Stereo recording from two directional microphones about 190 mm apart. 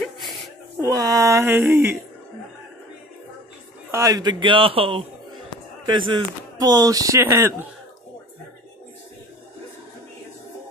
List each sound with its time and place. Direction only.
0.0 s a sound: centre (ahead or behind)
0.7 s speech: 20° right (ahead or behind)
3.9 s a man's voice: 20° right (ahead or behind)